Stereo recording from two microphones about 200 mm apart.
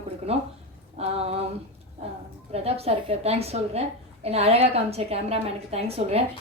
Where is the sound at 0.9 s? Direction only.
30° right (ahead or behind).